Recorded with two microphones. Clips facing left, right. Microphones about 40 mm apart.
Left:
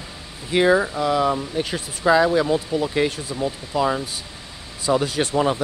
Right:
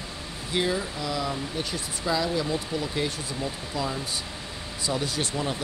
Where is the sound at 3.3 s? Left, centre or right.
Left.